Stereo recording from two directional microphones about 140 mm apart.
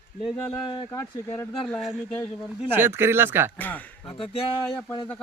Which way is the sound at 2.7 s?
15° right (ahead or behind).